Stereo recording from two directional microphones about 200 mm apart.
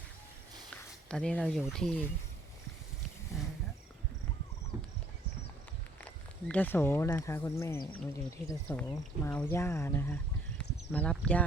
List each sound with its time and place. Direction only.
1.0 s speech: 5° left (ahead or behind)
6.0 s speech: 5° left (ahead or behind)